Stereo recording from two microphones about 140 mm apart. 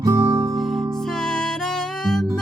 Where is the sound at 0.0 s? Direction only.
20° right (ahead or behind).